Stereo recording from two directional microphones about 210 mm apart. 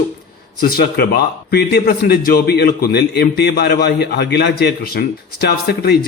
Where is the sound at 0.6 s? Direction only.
45° left (ahead or behind).